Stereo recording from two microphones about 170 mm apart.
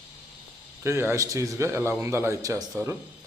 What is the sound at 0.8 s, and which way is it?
Speech, 15° right (ahead or behind).